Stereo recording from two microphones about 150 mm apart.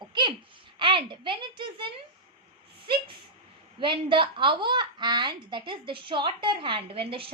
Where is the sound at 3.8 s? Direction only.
35° right (ahead or behind).